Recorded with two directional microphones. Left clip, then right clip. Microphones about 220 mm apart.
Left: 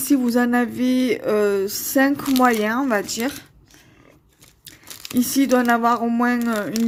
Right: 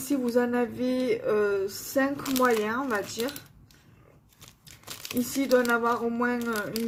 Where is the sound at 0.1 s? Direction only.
50° left (ahead or behind).